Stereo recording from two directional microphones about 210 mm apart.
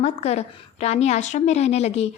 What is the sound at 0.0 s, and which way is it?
A woman's voice, 30° left (ahead or behind).